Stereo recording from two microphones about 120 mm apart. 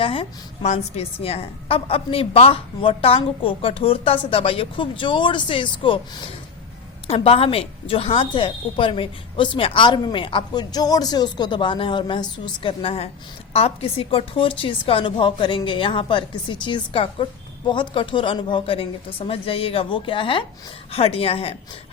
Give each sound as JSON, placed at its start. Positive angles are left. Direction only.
{"t": 0.0, "sound": "a woman's voice", "side_deg": 50}
{"t": 0.6, "sound": "a woman's voice", "side_deg": 65}